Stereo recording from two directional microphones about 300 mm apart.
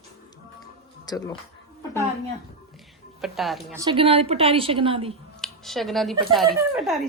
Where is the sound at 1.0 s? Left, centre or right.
Centre.